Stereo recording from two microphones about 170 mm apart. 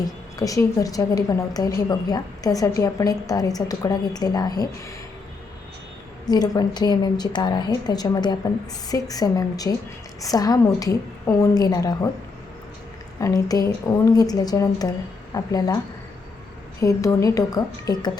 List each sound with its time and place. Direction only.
0.3 s a woman's voice: 20° left (ahead or behind)
6.2 s a woman's voice: 25° left (ahead or behind)
13.1 s a woman's voice: 20° left (ahead or behind)
16.8 s a woman's voice: 20° left (ahead or behind)